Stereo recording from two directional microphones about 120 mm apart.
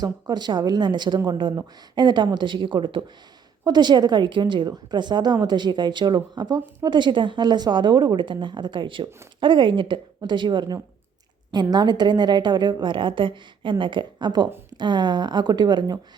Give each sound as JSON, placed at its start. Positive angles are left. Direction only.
{"t": 0.0, "sound": "a woman's voice", "side_deg": -35}